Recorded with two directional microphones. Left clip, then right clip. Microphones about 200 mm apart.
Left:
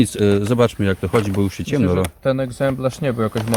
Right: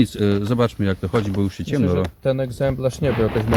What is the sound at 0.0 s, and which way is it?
Speech, 5° left (ahead or behind).